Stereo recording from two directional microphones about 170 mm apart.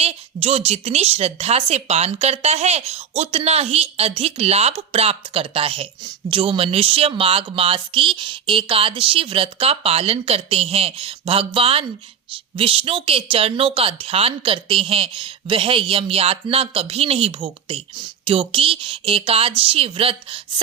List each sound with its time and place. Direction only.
0.0 s speech: 35° right (ahead or behind)